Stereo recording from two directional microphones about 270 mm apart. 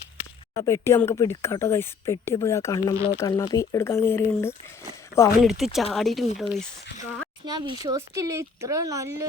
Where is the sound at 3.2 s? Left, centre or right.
Centre.